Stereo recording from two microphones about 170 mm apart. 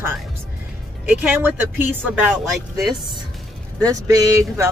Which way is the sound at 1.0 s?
10° right (ahead or behind).